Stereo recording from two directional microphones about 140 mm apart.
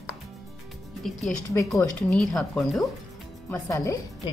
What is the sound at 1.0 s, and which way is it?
Speech, centre (ahead or behind).